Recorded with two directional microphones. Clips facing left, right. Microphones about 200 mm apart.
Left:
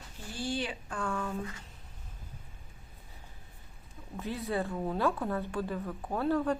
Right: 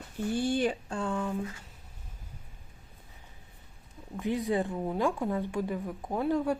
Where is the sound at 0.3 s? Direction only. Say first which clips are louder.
Right 7 dB; 55° right (ahead or behind).